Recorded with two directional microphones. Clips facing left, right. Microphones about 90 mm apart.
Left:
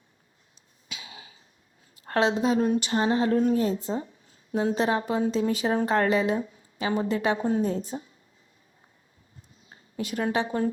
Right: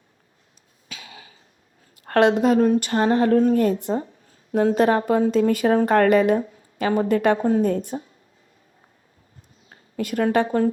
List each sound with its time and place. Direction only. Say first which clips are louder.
0.9 s cough: right 2 dB; 50° right (ahead or behind)
2.0 s speech: right 7 dB; 60° right (ahead or behind)
4.0 s speech: right 3 dB; 50° right (ahead or behind)
10.0 s speech: right 7 dB; 50° right (ahead or behind)